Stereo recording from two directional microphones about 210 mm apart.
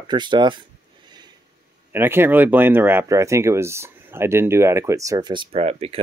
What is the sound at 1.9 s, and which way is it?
Speech, 10° right (ahead or behind).